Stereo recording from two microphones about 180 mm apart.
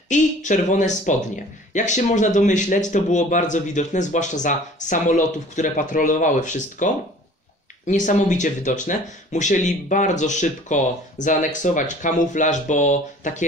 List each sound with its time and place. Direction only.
0.1 s speech: 45° left (ahead or behind)